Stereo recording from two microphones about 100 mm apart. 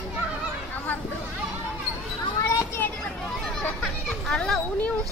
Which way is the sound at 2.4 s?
30° left (ahead or behind).